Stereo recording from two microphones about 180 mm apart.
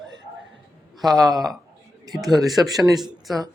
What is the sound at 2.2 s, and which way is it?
Speech, centre (ahead or behind).